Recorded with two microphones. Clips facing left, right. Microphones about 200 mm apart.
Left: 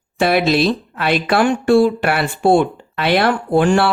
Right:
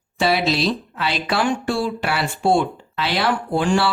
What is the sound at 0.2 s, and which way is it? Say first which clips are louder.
Speech: left 5 dB; 55° left (ahead or behind).